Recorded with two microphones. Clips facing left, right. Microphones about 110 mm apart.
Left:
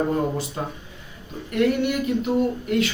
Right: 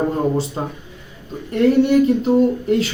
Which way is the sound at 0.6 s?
25° right (ahead or behind).